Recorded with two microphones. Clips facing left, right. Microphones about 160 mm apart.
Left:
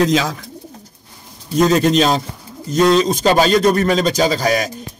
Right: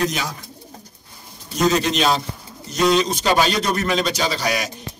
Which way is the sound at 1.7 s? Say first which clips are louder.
Left 4 dB; 45° left (ahead or behind).